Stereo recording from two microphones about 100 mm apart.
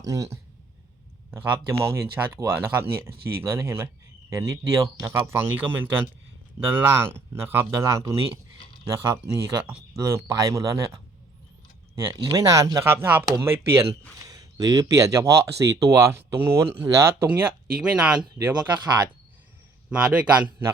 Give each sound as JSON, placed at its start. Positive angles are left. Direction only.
{"t": 0.0, "sound": "speech", "side_deg": -35}
{"t": 1.3, "sound": "speech", "side_deg": -25}
{"t": 7.7, "sound": "speech", "side_deg": -35}
{"t": 11.9, "sound": "speech", "side_deg": -35}
{"t": 12.8, "sound": "speech", "side_deg": -25}
{"t": 13.2, "sound": "speech", "side_deg": -35}
{"t": 17.7, "sound": "speech", "side_deg": -10}
{"t": 19.9, "sound": "speech", "side_deg": -10}